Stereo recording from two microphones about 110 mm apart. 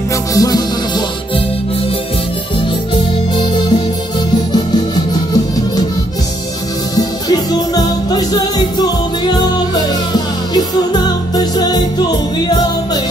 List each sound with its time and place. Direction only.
0.3 s music: 35° left (ahead or behind)
3.3 s music: 45° left (ahead or behind)
7.0 s music: 35° left (ahead or behind)